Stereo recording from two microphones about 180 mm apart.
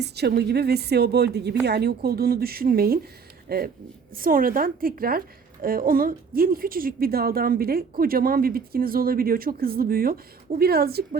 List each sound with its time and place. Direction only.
0.0 s a woman's voice: 65° right (ahead or behind)